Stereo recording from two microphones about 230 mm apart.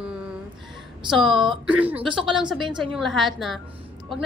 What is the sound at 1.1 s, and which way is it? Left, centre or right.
Speech, centre.